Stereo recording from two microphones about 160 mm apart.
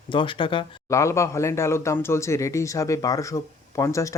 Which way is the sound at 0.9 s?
20° left (ahead or behind).